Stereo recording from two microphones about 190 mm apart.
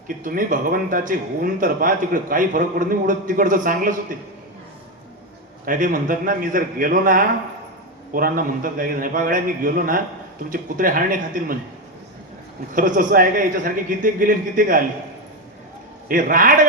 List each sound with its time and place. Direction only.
0.2 s speech: 45° right (ahead or behind)
5.6 s speech: 45° right (ahead or behind)
12.7 s speech: 45° right (ahead or behind)
16.0 s speech: 45° right (ahead or behind)